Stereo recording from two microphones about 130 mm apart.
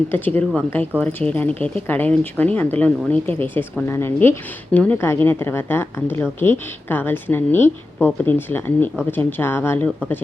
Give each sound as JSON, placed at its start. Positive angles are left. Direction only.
{"t": 0.1, "sound": "speech", "side_deg": 10}